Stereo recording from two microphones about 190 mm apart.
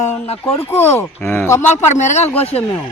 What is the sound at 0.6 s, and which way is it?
Speech, 10° left (ahead or behind).